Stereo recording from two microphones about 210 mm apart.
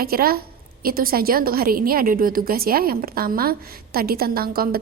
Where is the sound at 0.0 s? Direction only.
45° right (ahead or behind).